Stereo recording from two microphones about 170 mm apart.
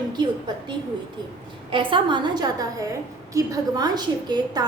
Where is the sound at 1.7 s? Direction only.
30° right (ahead or behind).